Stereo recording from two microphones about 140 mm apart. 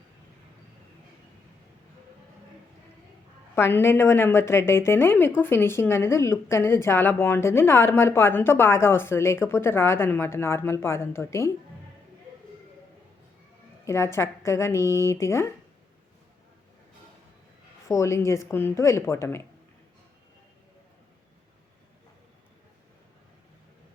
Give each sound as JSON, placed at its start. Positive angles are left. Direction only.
{"t": 3.5, "sound": "a woman's voice", "side_deg": 15}
{"t": 13.8, "sound": "speech", "side_deg": 20}
{"t": 17.8, "sound": "speech", "side_deg": 20}